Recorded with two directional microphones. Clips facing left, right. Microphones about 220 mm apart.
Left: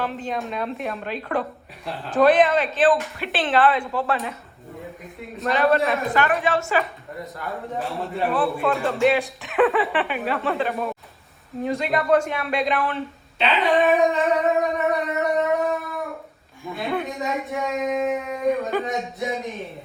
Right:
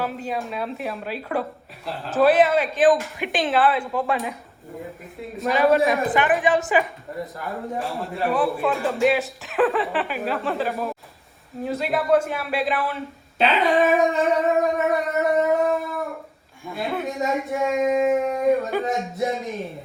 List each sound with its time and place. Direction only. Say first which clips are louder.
0.0 s a woman's voice: even; 10° right (ahead or behind)
5.7 s a woman's voice: right 2 dB; 15° right (ahead or behind)
7.4 s speech: left 1 dB; centre (ahead or behind)
13.4 s dog: right 1 dB; centre (ahead or behind)
16.7 s speech: even; centre (ahead or behind)